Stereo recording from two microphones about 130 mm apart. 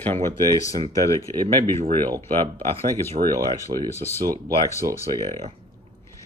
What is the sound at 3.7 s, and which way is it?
Speech, 45° right (ahead or behind).